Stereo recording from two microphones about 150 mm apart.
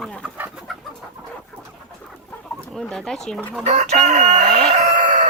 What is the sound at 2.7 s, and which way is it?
Speech, 5° left (ahead or behind).